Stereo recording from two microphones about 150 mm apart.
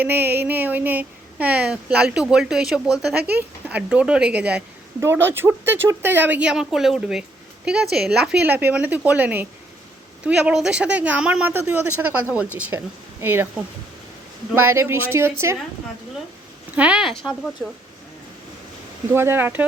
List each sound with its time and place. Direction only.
0.0 s a woman's voice: 15° right (ahead or behind)
14.7 s a woman's voice: 15° right (ahead or behind)
16.7 s speech: 10° right (ahead or behind)
19.1 s a woman's voice: 15° right (ahead or behind)